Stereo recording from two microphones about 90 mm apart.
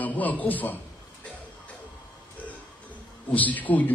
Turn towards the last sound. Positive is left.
turn(degrees=20)  # may be behind; listen again after turning